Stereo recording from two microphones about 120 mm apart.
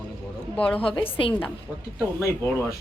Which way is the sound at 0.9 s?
50° left (ahead or behind).